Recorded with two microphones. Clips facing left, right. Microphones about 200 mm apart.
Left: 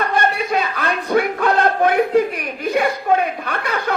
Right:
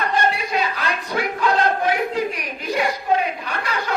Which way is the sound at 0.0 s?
55° left (ahead or behind).